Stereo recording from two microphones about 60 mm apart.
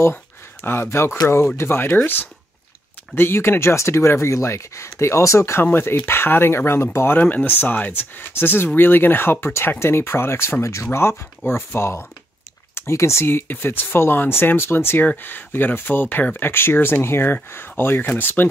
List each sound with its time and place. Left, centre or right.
0.1 s speech: left
3.2 s speech: left
7.2 s speech: left